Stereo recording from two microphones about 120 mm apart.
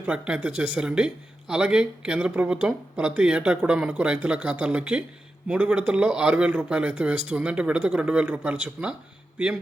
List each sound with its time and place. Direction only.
0.0 s speech: 10° right (ahead or behind)